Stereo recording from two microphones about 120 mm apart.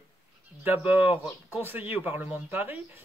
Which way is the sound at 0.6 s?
15° right (ahead or behind).